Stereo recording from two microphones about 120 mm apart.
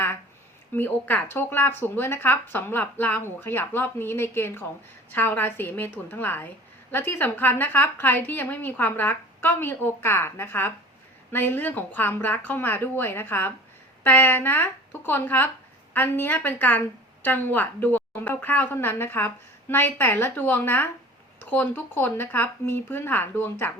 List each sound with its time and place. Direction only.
0.8 s a woman's voice: 15° left (ahead or behind)